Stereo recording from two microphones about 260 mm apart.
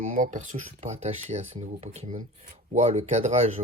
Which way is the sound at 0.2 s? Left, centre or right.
Right.